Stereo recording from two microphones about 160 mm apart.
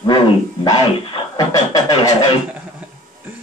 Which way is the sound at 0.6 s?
25° left (ahead or behind).